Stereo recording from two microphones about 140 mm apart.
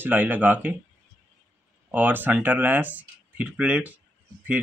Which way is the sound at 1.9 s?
15° right (ahead or behind).